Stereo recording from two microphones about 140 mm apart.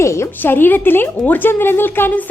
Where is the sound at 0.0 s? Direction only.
20° left (ahead or behind).